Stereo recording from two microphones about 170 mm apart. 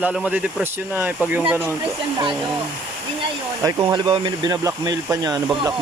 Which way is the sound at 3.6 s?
20° right (ahead or behind).